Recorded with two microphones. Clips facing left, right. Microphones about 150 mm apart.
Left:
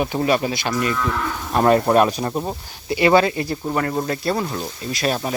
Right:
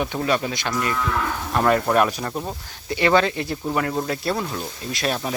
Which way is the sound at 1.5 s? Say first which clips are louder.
Left 4 dB; 25° left (ahead or behind).